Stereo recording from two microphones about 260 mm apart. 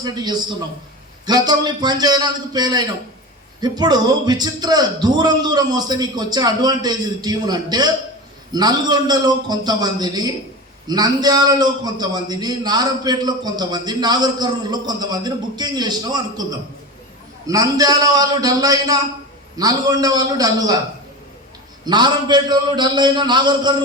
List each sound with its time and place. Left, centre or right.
0.0 s a man's voice: centre
21.8 s a man's voice: centre